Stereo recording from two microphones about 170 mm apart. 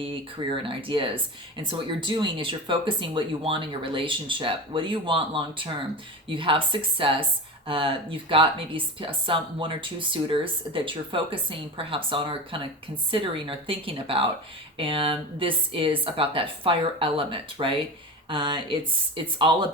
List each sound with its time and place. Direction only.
0.0 s speech: 30° right (ahead or behind)